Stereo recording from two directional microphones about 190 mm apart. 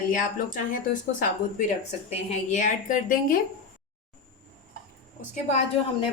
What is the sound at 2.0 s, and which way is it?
A woman's voice, 40° left (ahead or behind).